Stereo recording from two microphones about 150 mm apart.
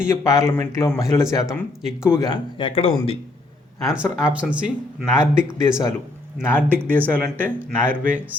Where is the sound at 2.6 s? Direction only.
40° left (ahead or behind).